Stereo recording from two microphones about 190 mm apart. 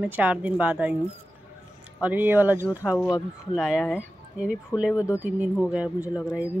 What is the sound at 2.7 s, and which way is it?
Speech, 15° left (ahead or behind).